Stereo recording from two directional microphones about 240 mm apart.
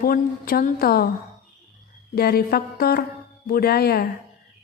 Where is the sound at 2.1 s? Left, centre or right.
Left.